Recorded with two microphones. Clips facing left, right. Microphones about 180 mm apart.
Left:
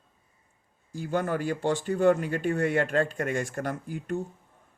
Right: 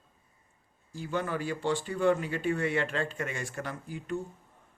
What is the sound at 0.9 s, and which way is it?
Speech, 45° left (ahead or behind).